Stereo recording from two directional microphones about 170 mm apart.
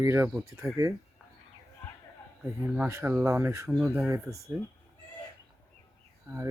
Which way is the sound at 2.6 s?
10° right (ahead or behind).